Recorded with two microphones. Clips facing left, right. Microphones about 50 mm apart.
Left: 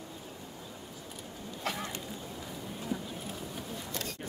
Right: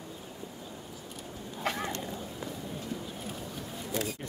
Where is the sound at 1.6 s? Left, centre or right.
Centre.